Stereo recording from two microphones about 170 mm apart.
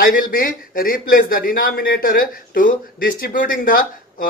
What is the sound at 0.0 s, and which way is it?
A man's voice, 55° left (ahead or behind).